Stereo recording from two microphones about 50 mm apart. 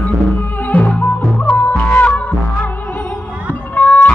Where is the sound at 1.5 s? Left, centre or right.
Left.